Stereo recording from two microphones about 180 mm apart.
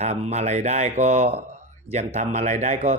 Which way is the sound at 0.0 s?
40° right (ahead or behind).